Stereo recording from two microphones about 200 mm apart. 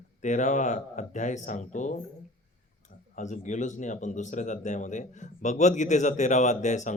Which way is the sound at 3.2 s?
35° left (ahead or behind).